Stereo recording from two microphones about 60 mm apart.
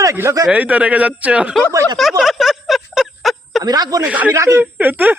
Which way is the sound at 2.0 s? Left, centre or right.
Centre.